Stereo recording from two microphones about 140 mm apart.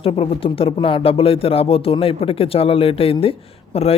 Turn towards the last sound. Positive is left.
turn(degrees=45)  # may be behind; listen again after turning